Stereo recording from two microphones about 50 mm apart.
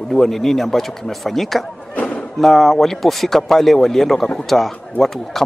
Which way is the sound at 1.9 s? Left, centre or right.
Left.